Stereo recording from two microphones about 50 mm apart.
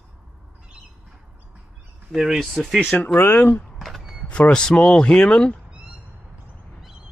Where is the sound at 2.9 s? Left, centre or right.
Left.